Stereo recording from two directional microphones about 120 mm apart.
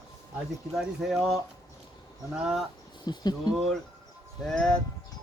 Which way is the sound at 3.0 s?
35° left (ahead or behind).